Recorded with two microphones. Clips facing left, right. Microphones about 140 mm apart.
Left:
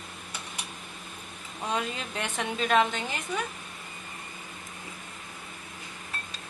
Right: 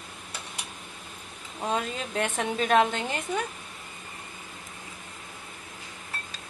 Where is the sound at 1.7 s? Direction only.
45° right (ahead or behind).